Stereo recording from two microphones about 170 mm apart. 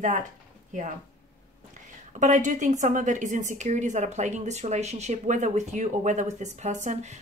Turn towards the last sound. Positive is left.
turn(degrees=-45)  # may be behind; listen again after turning